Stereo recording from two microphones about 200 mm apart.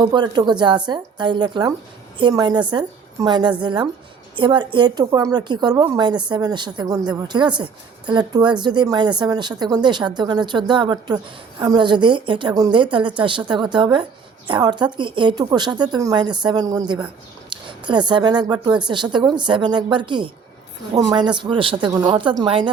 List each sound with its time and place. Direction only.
0.0 s speech: 20° right (ahead or behind)